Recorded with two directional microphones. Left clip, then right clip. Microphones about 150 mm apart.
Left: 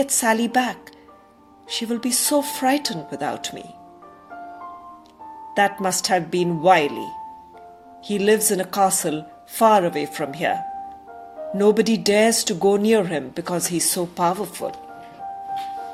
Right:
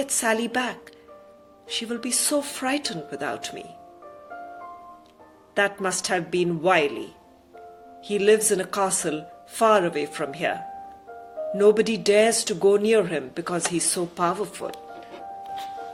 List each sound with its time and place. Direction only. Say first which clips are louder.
0.0 s speech: left 4 dB; 55° left (ahead or behind)
5.5 s speech: left 4 dB; 55° left (ahead or behind)